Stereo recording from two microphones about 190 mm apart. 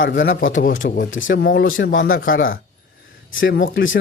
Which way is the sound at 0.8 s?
55° left (ahead or behind).